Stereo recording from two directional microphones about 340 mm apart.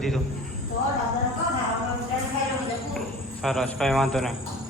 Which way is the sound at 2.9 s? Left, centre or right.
Centre.